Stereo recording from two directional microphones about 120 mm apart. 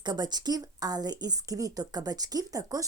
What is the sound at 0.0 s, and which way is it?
Speech, 35° right (ahead or behind).